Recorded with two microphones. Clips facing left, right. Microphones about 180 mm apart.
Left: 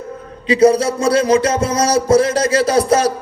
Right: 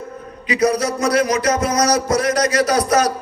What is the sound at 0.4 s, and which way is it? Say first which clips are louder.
A man's voice: left 6 dB; 30° left (ahead or behind).